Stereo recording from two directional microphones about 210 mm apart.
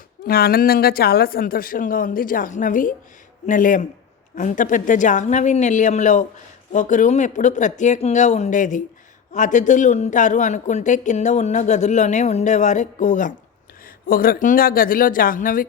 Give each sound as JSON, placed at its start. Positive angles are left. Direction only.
{"t": 0.3, "sound": "speech", "side_deg": 45}